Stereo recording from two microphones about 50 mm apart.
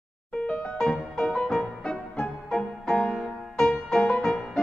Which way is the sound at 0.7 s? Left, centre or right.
Centre.